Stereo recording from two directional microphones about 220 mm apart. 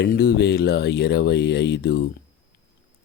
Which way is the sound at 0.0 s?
45° left (ahead or behind).